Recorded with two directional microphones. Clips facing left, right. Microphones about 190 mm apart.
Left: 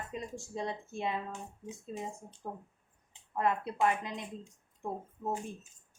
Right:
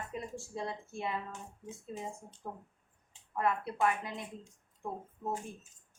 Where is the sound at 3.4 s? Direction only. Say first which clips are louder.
Left 1 dB; 20° left (ahead or behind).